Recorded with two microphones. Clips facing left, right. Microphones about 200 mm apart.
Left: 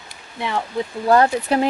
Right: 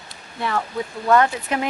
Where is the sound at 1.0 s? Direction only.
35° left (ahead or behind).